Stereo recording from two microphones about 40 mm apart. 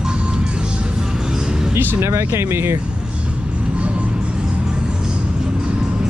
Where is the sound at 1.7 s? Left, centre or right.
Right.